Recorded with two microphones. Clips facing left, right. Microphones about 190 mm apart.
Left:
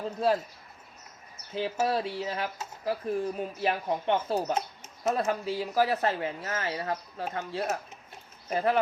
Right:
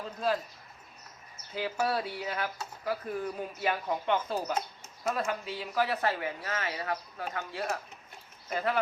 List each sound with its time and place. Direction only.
1.5 s speech: 25° left (ahead or behind)
5.2 s speech: 35° left (ahead or behind)